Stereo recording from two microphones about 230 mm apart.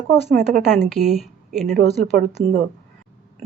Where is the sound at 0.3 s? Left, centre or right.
Right.